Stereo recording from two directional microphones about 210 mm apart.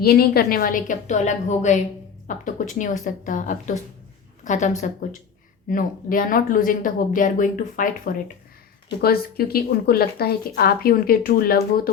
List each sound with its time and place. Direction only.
0.0 s a woman's voice: 45° left (ahead or behind)